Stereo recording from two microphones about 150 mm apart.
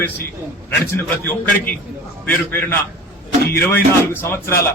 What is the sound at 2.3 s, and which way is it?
Speech, 15° left (ahead or behind).